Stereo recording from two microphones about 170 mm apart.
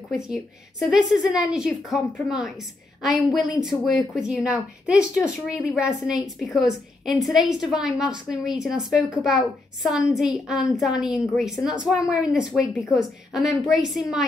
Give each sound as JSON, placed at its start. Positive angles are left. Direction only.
{"t": 0.2, "sound": "a woman's voice", "side_deg": 0}